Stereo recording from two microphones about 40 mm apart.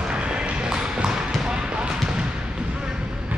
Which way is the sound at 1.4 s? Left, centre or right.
Right.